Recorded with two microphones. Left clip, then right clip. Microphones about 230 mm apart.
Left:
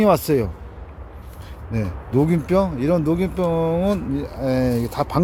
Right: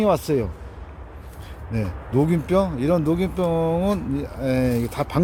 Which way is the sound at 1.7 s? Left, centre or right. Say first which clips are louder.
Left 2 dB; centre.